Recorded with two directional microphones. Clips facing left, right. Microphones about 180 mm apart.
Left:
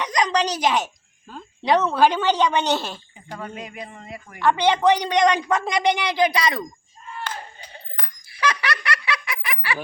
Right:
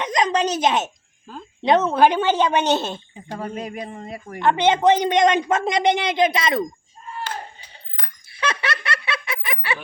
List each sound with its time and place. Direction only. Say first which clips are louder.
0.0 s a sound: right 1 dB; 20° right (ahead or behind)
1.6 s speech: right 2 dB; 20° right (ahead or behind)
3.3 s speech: right 5 dB; 40° right (ahead or behind)
4.4 s speech: right 1 dB; 20° right (ahead or behind)
8.3 s giggle: left 1 dB; 25° right (ahead or behind)